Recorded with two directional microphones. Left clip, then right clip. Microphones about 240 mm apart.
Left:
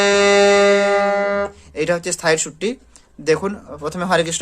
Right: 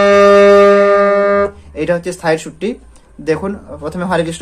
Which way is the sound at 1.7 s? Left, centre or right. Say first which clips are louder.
Right 3 dB; left.